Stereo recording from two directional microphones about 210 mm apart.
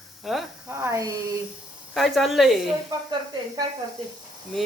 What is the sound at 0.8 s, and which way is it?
Speech, 15° right (ahead or behind).